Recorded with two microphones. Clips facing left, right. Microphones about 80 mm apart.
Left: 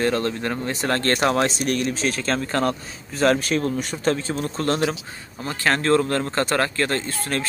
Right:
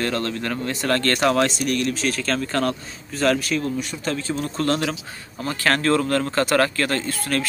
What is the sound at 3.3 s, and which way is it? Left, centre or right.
Speech, left.